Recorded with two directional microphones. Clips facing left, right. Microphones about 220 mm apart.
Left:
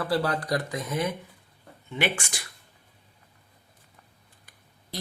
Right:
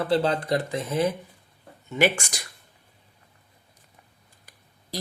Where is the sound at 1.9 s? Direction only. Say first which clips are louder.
Right 6 dB; 40° right (ahead or behind).